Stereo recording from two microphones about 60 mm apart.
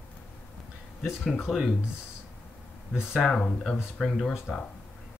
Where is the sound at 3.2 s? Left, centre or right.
Centre.